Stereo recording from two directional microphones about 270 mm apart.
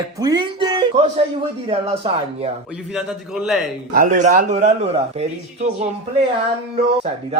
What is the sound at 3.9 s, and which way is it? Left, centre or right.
Speech, right.